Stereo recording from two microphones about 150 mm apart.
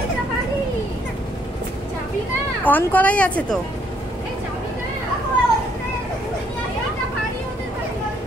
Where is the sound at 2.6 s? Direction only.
10° left (ahead or behind).